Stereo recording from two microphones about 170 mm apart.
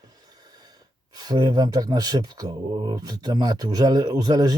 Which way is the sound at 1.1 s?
25° right (ahead or behind).